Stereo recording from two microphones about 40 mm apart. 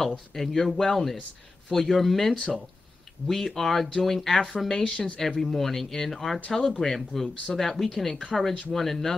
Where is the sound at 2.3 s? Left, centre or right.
Left.